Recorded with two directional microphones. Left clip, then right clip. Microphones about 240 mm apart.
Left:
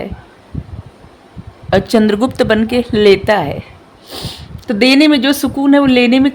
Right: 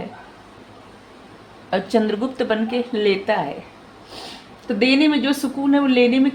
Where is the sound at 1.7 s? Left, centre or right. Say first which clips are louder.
Left 8 dB; left.